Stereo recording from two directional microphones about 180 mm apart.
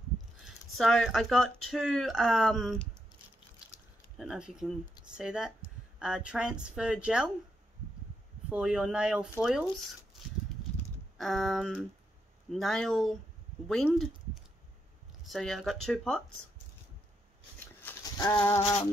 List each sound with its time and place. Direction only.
0.5 s speech: centre (ahead or behind)
4.2 s speech: 5° right (ahead or behind)
8.5 s speech: 5° right (ahead or behind)
11.1 s speech: centre (ahead or behind)
17.8 s a sound: 20° left (ahead or behind)